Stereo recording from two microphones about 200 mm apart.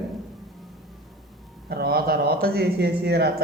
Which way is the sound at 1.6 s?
50° right (ahead or behind).